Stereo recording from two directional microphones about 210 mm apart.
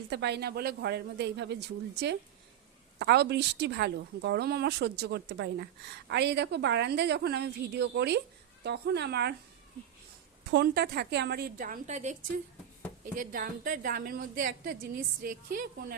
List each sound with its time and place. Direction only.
0.1 s speech: 55° right (ahead or behind)
10.5 s speech: 50° right (ahead or behind); by 12.1 s 35° right (ahead or behind)
13.1 s a woman's voice: 40° right (ahead or behind)